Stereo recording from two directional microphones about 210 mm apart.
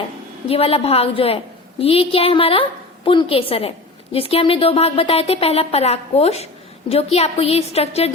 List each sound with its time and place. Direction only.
0.4 s speech: 25° left (ahead or behind)